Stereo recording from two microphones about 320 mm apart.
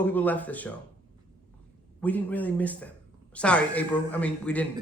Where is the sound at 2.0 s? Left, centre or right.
Centre.